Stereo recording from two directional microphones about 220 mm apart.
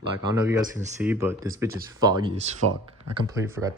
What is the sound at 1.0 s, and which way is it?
Speech, 10° right (ahead or behind).